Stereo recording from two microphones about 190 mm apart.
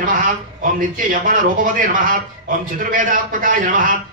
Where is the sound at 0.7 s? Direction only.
45° right (ahead or behind).